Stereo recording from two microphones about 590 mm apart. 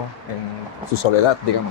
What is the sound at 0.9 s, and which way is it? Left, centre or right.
Speech, left.